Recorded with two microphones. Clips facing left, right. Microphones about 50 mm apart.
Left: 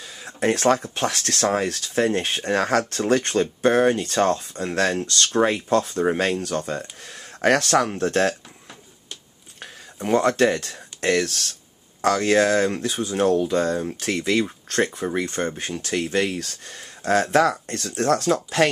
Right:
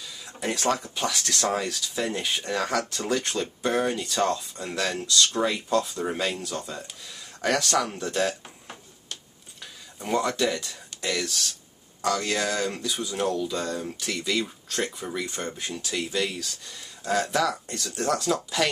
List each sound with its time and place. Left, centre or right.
0.0 s speech: left
10.0 s speech: left